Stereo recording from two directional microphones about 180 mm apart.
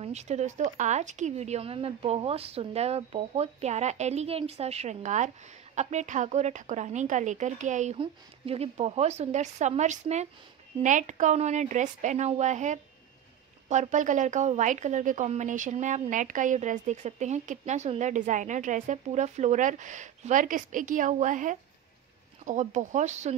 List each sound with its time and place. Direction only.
0.0 s a woman's voice: 40° right (ahead or behind)